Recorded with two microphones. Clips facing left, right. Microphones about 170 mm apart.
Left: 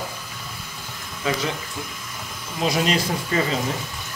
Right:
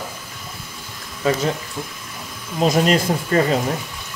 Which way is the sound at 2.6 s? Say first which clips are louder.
Right 5 dB; 45° right (ahead or behind).